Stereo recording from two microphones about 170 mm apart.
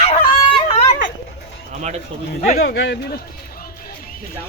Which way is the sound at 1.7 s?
45° right (ahead or behind).